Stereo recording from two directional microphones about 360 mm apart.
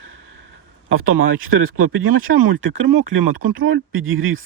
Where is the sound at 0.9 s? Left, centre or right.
Right.